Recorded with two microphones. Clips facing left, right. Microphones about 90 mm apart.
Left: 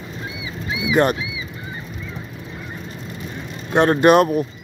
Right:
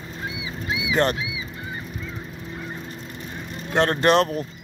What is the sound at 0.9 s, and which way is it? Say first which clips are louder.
Speech: left 5 dB; 15° left (ahead or behind).